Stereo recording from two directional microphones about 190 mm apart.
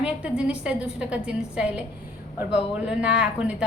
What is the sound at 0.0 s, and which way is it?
A woman's voice, 5° right (ahead or behind).